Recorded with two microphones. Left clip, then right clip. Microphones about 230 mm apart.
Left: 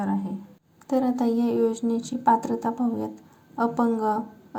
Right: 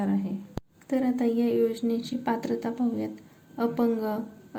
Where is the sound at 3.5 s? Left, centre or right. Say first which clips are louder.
Left 3 dB; left.